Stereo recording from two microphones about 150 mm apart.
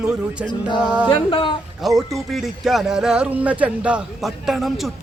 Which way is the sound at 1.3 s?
35° left (ahead or behind).